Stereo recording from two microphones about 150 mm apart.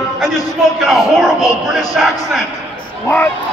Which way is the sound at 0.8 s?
Centre (ahead or behind).